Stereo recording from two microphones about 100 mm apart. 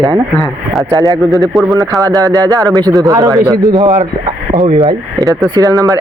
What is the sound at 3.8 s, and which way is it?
Speech, 65° right (ahead or behind).